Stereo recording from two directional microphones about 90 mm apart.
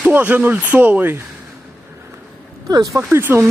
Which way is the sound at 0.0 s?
20° right (ahead or behind).